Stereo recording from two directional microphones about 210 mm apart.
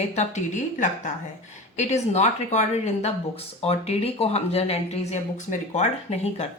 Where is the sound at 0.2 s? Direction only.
35° left (ahead or behind).